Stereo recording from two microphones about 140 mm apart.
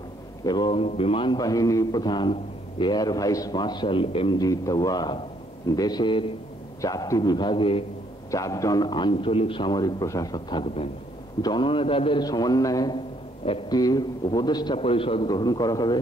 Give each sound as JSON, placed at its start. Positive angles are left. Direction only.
{"t": 0.4, "sound": "a man's voice", "side_deg": 30}
{"t": 8.3, "sound": "a man's voice", "side_deg": 25}